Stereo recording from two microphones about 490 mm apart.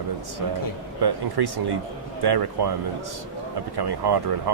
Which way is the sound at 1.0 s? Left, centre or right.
Right.